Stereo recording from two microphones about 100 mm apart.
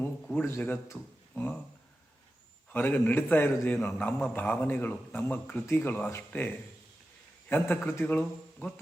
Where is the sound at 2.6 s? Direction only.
20° left (ahead or behind).